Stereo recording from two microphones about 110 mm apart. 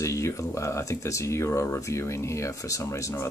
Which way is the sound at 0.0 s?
25° left (ahead or behind).